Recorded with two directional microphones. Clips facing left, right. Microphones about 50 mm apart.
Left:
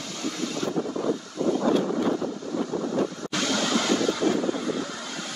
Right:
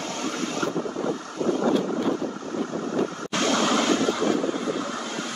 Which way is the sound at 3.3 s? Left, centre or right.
Right.